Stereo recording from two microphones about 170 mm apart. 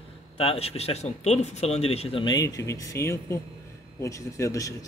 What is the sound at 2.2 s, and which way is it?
Speech, 20° left (ahead or behind).